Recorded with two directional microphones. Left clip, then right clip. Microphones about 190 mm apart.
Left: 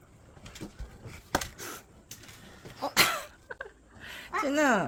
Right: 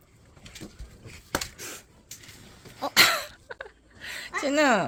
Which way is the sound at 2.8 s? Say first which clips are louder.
Right 5 dB; 15° right (ahead or behind).